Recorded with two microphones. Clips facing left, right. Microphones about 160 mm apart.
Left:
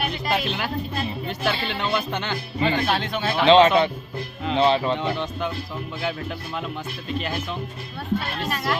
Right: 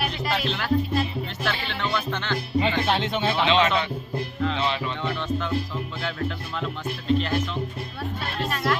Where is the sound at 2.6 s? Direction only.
20° right (ahead or behind).